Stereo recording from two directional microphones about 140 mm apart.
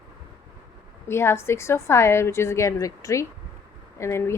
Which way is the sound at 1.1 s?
20° left (ahead or behind).